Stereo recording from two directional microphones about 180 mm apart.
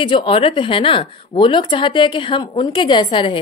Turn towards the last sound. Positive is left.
turn(degrees=25)  # may be behind; listen again after turning